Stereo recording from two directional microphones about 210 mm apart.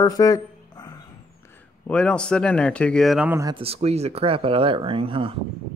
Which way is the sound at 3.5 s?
30° right (ahead or behind).